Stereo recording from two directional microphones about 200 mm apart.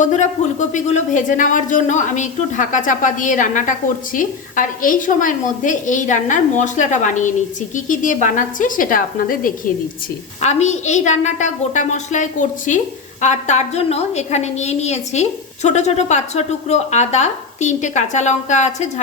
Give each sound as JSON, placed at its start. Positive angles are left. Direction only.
{"t": 0.0, "sound": "speech", "side_deg": 40}